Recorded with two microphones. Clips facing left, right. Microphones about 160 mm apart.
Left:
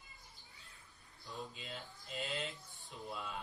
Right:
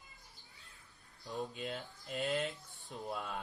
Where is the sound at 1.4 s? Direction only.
50° right (ahead or behind).